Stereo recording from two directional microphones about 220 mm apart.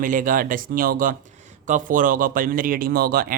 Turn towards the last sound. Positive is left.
turn(degrees=-40)  # may be behind; listen again after turning